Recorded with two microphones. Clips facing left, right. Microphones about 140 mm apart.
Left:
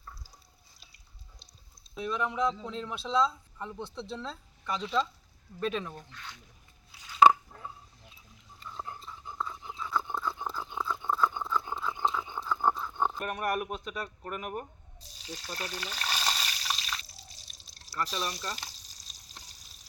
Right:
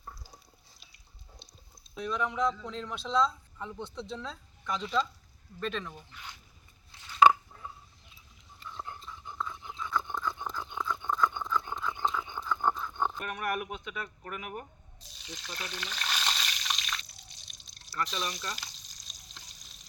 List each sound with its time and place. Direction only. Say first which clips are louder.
2.0 s speech: even; 5° left (ahead or behind)
5.9 s speech: left 2 dB; 10° right (ahead or behind)
6.9 s a sound: left 1 dB; 10° left (ahead or behind)
8.7 s a sound: left 1 dB; 5° left (ahead or behind)
13.2 s speech: left 2 dB; 40° left (ahead or behind)
15.2 s frying: left 3 dB; 35° left (ahead or behind)
17.9 s speech: left 1 dB; 10° left (ahead or behind)
18.4 s frying: left 1 dB; 35° left (ahead or behind)